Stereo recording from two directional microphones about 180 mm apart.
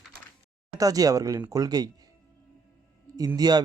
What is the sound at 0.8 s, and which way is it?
A man's voice, 20° right (ahead or behind).